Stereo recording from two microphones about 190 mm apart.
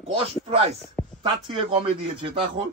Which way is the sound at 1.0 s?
5° left (ahead or behind).